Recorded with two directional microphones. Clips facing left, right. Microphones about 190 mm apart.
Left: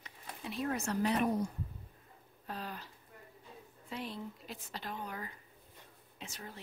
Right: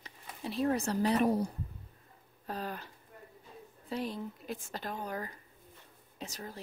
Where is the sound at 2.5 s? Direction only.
45° right (ahead or behind).